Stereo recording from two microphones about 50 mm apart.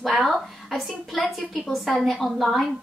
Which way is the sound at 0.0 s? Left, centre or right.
Centre.